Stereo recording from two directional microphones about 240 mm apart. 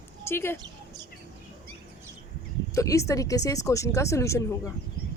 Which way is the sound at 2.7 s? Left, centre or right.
Centre.